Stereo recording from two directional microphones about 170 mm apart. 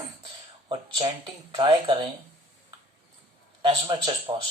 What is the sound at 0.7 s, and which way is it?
Speech, 30° right (ahead or behind).